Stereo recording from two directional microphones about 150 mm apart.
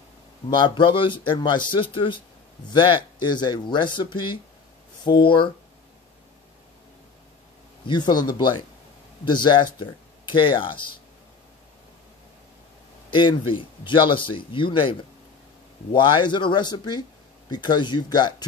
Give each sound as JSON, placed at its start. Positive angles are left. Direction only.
{"t": 0.5, "sound": "speech", "side_deg": 30}
{"t": 7.8, "sound": "speech", "side_deg": 30}
{"t": 13.1, "sound": "speech", "side_deg": 30}